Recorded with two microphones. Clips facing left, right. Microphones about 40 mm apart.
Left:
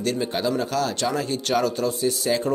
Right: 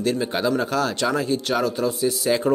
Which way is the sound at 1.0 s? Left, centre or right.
Centre.